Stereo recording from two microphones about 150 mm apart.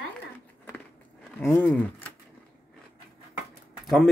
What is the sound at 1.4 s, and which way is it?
Speech, 15° left (ahead or behind).